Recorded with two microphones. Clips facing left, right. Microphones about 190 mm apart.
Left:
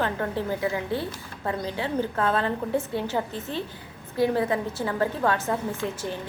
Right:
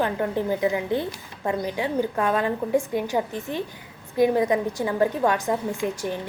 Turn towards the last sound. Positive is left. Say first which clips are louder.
# right 3 dB
turn(degrees=-15)  # may be behind; listen again after turning